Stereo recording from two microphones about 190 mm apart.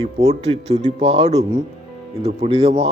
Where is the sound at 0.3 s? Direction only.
35° right (ahead or behind).